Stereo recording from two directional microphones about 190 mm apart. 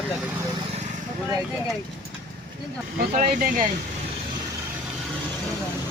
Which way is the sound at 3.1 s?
45° right (ahead or behind).